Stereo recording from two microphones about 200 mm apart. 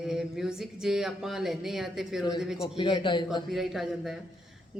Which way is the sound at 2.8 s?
25° left (ahead or behind).